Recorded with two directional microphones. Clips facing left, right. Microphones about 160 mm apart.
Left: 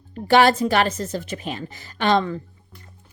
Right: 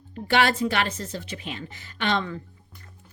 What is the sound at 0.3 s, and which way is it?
A woman's voice, 40° left (ahead or behind).